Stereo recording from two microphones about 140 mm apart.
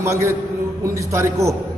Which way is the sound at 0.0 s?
20° right (ahead or behind).